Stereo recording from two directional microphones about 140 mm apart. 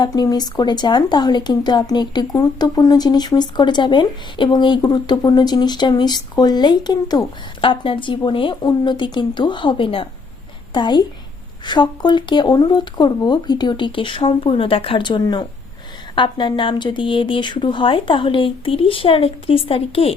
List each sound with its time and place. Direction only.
0.0 s speech: 30° left (ahead or behind)